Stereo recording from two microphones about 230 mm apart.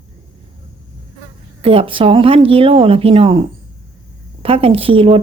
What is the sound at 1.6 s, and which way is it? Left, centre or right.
Speech, right.